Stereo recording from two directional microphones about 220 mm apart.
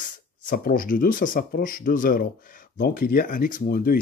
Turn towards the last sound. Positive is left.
turn(degrees=45)  # may be behind; listen again after turning